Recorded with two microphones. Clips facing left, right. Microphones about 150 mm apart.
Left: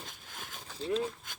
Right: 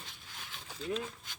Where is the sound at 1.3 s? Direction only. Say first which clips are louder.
Left 3 dB; 45° left (ahead or behind).